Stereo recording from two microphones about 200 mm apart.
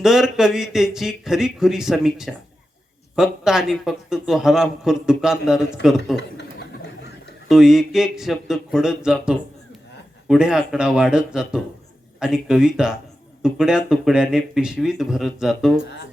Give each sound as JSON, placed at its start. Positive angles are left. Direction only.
{"t": 0.0, "sound": "a man's voice", "side_deg": 0}
{"t": 6.1, "sound": "a sound", "side_deg": 55}
{"t": 7.4, "sound": "a man's voice", "side_deg": 0}